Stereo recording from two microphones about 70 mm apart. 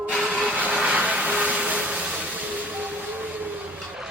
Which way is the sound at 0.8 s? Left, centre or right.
Centre.